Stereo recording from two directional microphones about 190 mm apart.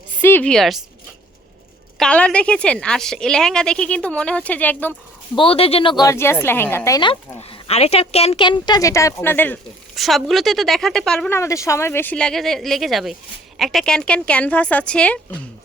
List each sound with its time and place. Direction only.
0.2 s a woman's voice: 10° left (ahead or behind)
2.0 s a woman's voice: 5° left (ahead or behind)
5.3 s a woman's voice: 30° left (ahead or behind); by 11.3 s 5° left (ahead or behind)
11.3 s a woman's voice: 15° left (ahead or behind)